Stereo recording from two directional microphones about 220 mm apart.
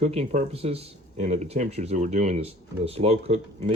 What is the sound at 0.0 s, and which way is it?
Speech, 30° right (ahead or behind).